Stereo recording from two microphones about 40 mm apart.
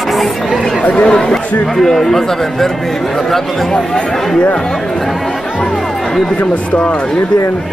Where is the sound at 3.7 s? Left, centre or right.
Left.